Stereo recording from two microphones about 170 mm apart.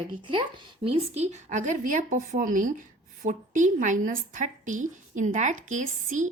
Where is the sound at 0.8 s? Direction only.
40° right (ahead or behind).